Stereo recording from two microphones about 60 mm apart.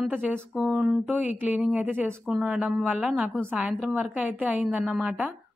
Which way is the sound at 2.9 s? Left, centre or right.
Right.